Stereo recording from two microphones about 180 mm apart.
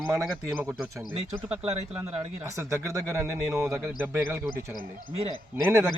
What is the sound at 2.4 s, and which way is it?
A man's voice, 15° right (ahead or behind).